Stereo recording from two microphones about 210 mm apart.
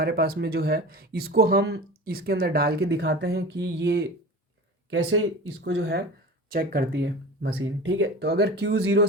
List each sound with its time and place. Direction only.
0.0 s speech: 45° right (ahead or behind)
4.9 s speech: 70° right (ahead or behind); by 7.5 s 50° right (ahead or behind)
7.5 s speech: 65° right (ahead or behind)